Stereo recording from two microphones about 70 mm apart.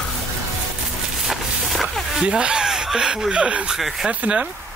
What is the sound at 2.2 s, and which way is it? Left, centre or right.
Speech, centre.